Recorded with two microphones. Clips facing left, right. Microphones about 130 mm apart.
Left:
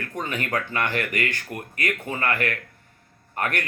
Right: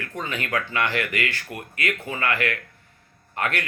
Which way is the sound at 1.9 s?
20° left (ahead or behind).